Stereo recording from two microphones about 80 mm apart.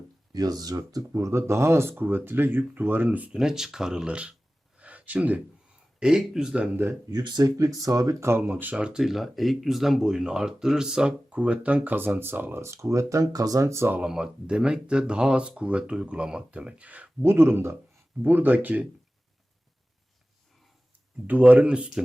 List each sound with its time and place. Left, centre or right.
0.3 s speech: right
3.3 s speech: centre
4.8 s a sound: centre
6.0 s speech: centre
7.1 s speech: right
8.4 s speech: right
14.0 s speech: centre
17.2 s speech: right
21.2 s speech: centre